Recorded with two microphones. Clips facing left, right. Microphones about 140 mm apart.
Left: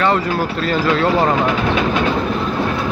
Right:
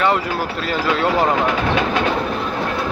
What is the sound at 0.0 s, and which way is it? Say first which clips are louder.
Speech: left 2 dB; 5° right (ahead or behind).